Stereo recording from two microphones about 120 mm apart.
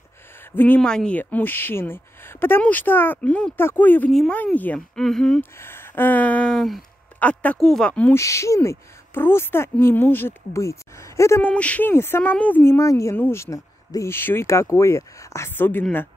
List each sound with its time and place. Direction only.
0.6 s speech: 10° left (ahead or behind)
4.1 s speech: centre (ahead or behind)
4.4 s speech: 15° left (ahead or behind)
4.7 s speech: 5° left (ahead or behind)
5.4 s speech: 20° left (ahead or behind)
8.1 s speech: 25° left (ahead or behind)
11.4 s speech: 10° left (ahead or behind)